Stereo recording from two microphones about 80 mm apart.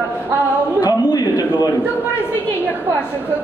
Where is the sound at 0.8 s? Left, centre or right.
Left.